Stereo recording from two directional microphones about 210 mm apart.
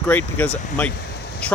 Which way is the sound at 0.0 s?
10° left (ahead or behind).